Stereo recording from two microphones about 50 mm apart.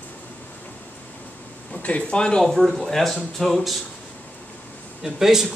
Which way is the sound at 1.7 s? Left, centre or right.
Left.